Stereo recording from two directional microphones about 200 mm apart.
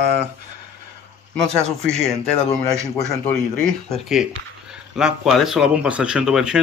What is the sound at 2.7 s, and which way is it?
Speech, 15° right (ahead or behind).